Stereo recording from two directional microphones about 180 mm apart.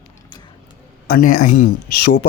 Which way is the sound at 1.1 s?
50° left (ahead or behind).